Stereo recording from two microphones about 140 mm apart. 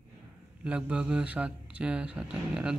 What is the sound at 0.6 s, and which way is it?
Speech, 10° right (ahead or behind).